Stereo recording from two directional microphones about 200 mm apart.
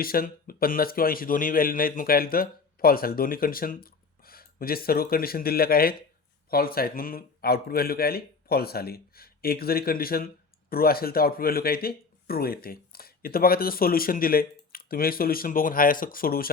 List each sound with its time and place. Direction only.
0.0 s speech: 45° left (ahead or behind)